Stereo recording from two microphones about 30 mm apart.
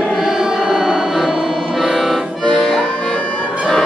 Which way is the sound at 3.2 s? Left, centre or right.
Left.